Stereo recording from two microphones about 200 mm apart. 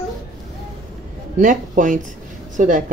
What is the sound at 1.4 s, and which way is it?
Speech, 40° right (ahead or behind).